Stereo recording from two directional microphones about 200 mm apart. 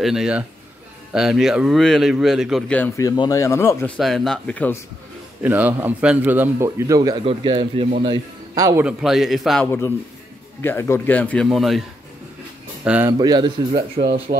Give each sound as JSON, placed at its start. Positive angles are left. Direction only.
{"t": 0.0, "sound": "speech", "side_deg": -5}
{"t": 3.0, "sound": "speech", "side_deg": 15}
{"t": 5.4, "sound": "a man's voice", "side_deg": -10}
{"t": 8.8, "sound": "speech", "side_deg": 0}
{"t": 9.7, "sound": "speech", "side_deg": 15}
{"t": 12.8, "sound": "a man's voice", "side_deg": -10}
{"t": 13.2, "sound": "a man's voice", "side_deg": -20}